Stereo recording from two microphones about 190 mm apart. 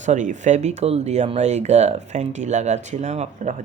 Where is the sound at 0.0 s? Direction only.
40° right (ahead or behind).